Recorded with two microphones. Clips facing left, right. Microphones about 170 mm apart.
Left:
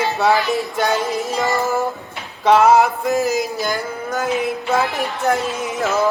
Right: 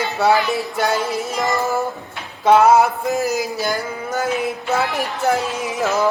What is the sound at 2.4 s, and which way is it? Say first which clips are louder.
Speech: even; centre (ahead or behind).